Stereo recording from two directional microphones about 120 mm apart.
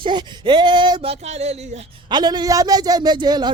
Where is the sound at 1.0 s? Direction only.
60° right (ahead or behind).